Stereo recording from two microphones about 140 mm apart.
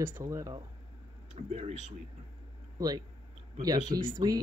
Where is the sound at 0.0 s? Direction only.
20° right (ahead or behind).